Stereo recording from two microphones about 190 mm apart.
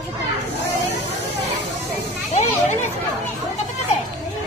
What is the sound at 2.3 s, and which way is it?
Children playing, 40° left (ahead or behind).